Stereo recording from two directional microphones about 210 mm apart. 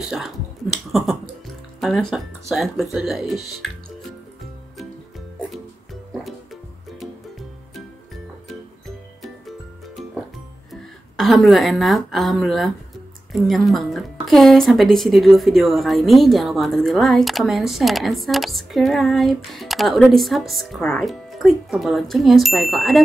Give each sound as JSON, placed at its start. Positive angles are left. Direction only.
{"t": 0.0, "sound": "a woman's voice", "side_deg": 0}
{"t": 6.2, "sound": "music", "side_deg": 0}
{"t": 8.8, "sound": "music", "side_deg": 0}
{"t": 10.7, "sound": "a woman's voice", "side_deg": 0}